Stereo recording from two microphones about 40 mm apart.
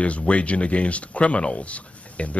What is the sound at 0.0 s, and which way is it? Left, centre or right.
Speech, left.